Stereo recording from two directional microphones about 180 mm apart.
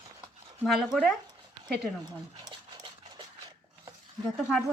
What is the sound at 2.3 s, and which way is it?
Dog, 25° right (ahead or behind).